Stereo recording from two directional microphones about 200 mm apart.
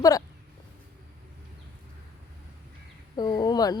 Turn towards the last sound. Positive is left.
turn(degrees=20)  # may be behind; listen again after turning